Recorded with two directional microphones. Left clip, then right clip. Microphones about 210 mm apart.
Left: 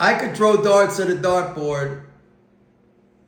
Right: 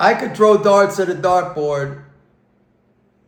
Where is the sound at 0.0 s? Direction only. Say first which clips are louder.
Right 4 dB; 15° right (ahead or behind).